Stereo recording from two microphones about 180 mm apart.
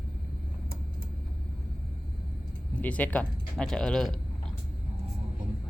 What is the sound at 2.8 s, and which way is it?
Speech, 10° left (ahead or behind).